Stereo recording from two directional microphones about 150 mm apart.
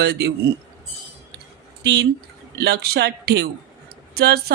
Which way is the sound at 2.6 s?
90° right.